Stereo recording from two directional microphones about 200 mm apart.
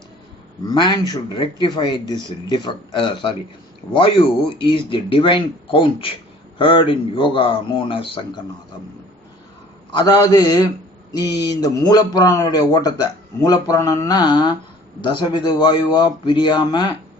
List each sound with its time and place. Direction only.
0.7 s a man's voice: 20° left (ahead or behind)
9.9 s a man's voice: 20° left (ahead or behind)